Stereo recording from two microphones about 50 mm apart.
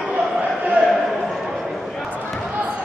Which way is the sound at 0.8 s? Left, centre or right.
Centre.